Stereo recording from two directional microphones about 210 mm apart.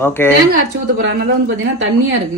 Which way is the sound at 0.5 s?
50° right (ahead or behind).